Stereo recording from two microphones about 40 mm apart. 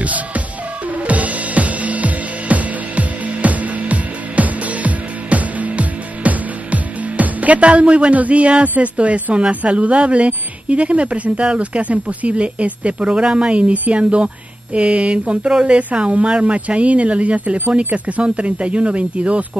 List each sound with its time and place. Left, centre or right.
0.0 s music: right
15.5 s speech: right